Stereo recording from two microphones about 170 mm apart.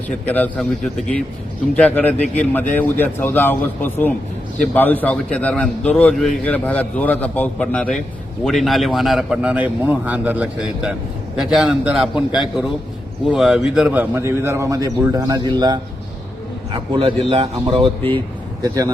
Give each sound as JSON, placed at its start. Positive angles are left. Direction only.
{"t": 0.3, "sound": "a man's voice", "side_deg": 10}
{"t": 1.7, "sound": "a man's voice", "side_deg": 10}
{"t": 18.6, "sound": "a man's voice", "side_deg": -20}